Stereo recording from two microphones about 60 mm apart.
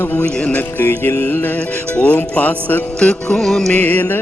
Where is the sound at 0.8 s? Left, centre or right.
Left.